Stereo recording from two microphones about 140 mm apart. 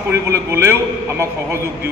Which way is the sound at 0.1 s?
20° right (ahead or behind).